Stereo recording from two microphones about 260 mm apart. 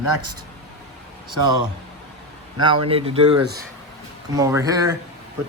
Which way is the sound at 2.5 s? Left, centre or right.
Centre.